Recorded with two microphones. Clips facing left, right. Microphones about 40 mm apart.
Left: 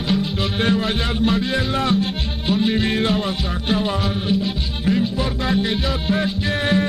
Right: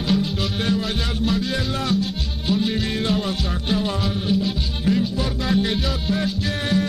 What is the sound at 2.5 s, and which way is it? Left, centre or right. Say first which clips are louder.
Music: left 3 dB; centre.